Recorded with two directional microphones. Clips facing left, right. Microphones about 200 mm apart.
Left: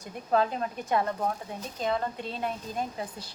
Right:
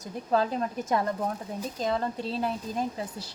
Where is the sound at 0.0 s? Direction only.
40° right (ahead or behind).